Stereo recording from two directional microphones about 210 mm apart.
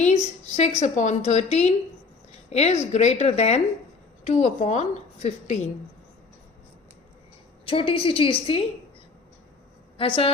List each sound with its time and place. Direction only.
0.0 s a woman's voice: 35° left (ahead or behind)
7.7 s a woman's voice: 25° left (ahead or behind)
10.0 s a woman's voice: 25° left (ahead or behind)